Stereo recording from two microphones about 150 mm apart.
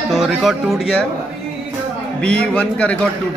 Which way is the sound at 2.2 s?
5° left (ahead or behind).